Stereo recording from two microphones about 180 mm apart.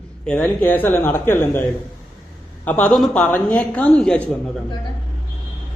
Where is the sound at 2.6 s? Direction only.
5° left (ahead or behind).